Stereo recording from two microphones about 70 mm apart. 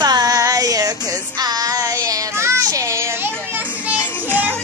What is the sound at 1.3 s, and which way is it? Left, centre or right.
Child singing, right.